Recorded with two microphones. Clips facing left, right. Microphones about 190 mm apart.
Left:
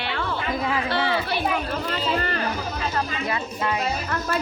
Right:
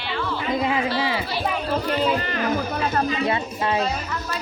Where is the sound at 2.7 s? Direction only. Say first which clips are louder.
Right 4 dB; 55° right (ahead or behind).